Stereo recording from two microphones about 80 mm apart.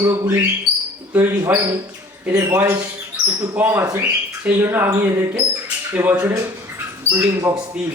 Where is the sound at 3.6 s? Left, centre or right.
Centre.